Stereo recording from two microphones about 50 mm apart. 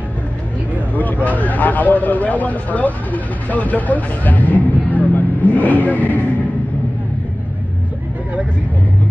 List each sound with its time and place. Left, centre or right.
0.9 s speech: left